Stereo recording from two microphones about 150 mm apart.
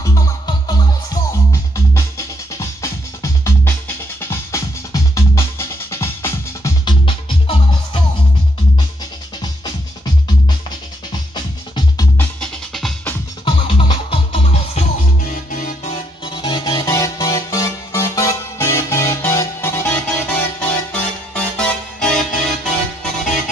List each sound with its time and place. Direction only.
0.0 s music: 25° left (ahead or behind)
6.8 s music: 30° left (ahead or behind)
11.1 s music: 30° left (ahead or behind)
12.2 s music: 5° left (ahead or behind)
13.5 s music: 35° left (ahead or behind)
15.5 s music: 65° left (ahead or behind)
15.9 s music: 30° left (ahead or behind); by 23.3 s 5° left (ahead or behind)